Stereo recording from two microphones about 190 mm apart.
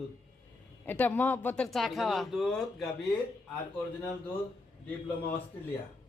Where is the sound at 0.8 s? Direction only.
10° left (ahead or behind).